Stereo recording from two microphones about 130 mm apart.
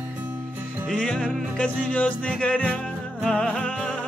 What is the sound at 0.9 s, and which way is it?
Music, 5° left (ahead or behind).